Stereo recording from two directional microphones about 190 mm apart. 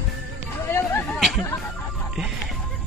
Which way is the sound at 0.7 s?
10° left (ahead or behind).